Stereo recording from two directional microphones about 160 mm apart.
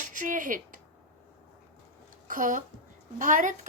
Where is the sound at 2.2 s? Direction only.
55° right (ahead or behind).